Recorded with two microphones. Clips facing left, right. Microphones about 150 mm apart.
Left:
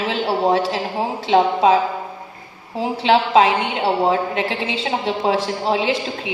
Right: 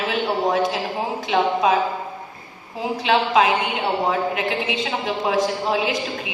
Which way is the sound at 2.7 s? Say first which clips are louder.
Left 3 dB; 30° left (ahead or behind).